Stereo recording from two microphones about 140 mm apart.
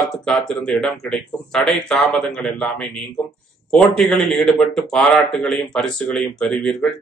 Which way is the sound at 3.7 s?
5° left (ahead or behind).